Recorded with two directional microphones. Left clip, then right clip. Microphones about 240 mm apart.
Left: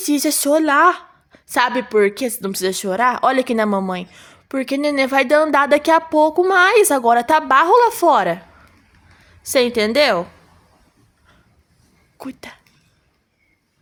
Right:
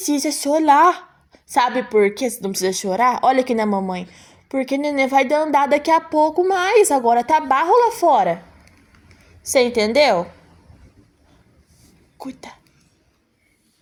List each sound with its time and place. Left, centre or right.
0.0 s a woman's voice: centre
9.5 s a woman's voice: centre
12.2 s a woman's voice: centre